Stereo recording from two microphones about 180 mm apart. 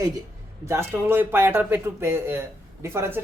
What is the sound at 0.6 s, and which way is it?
Speech, 15° right (ahead or behind).